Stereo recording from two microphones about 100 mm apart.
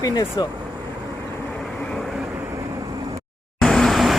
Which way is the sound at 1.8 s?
5° left (ahead or behind).